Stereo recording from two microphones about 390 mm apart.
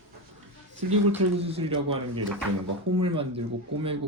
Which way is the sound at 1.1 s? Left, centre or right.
Centre.